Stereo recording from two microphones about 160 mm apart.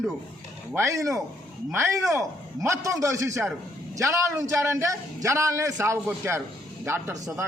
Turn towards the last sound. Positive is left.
turn(degrees=-20)  # may be behind; listen again after turning